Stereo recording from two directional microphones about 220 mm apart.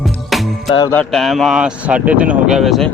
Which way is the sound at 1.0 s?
Centre (ahead or behind).